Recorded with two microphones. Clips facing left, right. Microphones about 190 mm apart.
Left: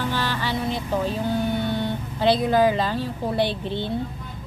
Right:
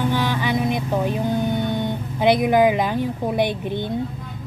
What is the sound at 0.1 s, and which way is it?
A woman's voice, 15° right (ahead or behind).